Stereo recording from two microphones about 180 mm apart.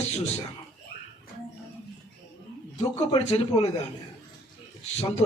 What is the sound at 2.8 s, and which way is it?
Speech, 35° left (ahead or behind).